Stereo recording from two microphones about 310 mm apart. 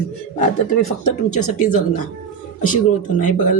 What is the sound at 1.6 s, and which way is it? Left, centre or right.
Speech, left.